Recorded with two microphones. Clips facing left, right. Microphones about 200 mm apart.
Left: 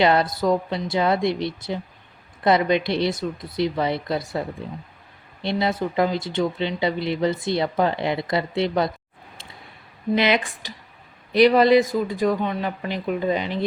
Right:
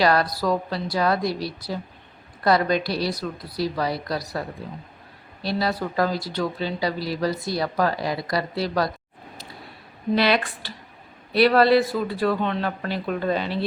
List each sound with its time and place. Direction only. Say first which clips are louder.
0.0 s speech: left 2 dB; 25° left (ahead or behind)
10.2 s speech: even; 20° left (ahead or behind)